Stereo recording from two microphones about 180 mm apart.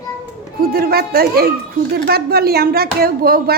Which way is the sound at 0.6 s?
55° right (ahead or behind).